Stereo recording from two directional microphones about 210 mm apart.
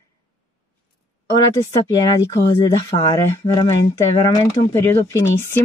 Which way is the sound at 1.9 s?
20° left (ahead or behind).